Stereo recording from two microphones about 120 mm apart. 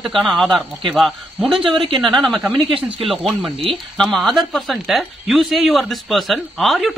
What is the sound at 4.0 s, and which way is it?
Speech, centre (ahead or behind).